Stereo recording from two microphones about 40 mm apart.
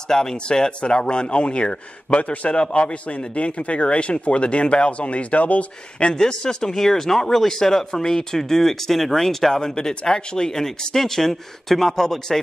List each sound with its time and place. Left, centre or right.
0.1 s speech: centre; by 6.0 s left
6.0 s speech: centre